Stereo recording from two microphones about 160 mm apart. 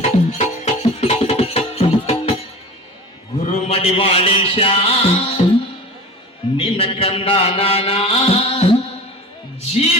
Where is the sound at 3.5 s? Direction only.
40° left (ahead or behind).